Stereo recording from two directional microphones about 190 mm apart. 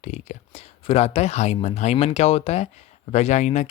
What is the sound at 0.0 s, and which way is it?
Speech, 40° left (ahead or behind).